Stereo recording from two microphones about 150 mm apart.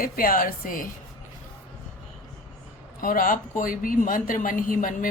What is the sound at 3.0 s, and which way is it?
Speech, 65° left (ahead or behind).